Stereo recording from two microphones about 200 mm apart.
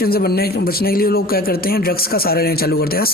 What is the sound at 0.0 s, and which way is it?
Speech, 50° left (ahead or behind).